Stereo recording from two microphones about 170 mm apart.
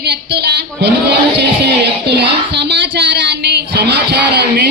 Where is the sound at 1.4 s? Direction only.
80° right.